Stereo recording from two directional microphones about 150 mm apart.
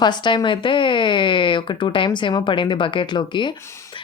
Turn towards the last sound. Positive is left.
turn(degrees=30)  # may be behind; listen again after turning